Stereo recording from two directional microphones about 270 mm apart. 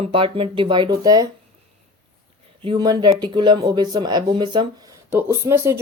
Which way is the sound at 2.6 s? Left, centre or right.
Centre.